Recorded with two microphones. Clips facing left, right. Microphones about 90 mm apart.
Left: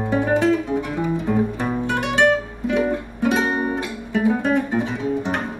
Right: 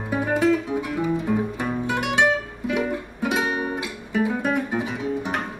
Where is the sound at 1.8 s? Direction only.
10° right (ahead or behind).